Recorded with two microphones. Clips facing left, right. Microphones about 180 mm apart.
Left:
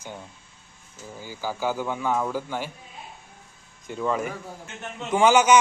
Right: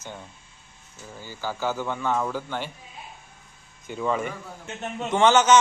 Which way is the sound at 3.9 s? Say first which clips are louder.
Even; centre (ahead or behind).